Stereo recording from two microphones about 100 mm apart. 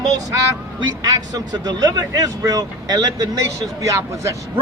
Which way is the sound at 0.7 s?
40° right (ahead or behind).